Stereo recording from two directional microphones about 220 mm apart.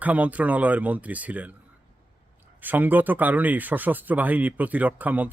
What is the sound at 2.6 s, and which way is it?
Speech, 10° right (ahead or behind).